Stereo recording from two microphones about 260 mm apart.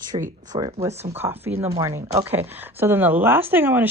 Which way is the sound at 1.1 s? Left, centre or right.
Centre.